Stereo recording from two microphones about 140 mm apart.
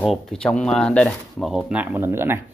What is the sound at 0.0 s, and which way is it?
Speech, centre (ahead or behind).